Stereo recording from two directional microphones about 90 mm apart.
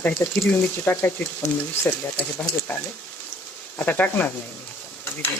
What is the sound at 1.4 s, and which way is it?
Speech, 30° left (ahead or behind).